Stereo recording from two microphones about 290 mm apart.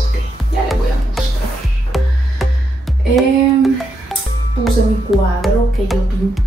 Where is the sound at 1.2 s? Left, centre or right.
Centre.